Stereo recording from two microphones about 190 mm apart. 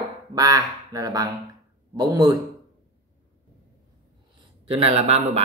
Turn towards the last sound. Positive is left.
turn(degrees=-35)  # may be behind; listen again after turning